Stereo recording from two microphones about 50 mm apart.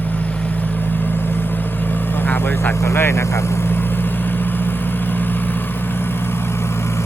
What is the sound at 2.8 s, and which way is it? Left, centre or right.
Speech, left.